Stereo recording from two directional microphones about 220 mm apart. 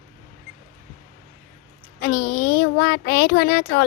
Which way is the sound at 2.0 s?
45° left (ahead or behind).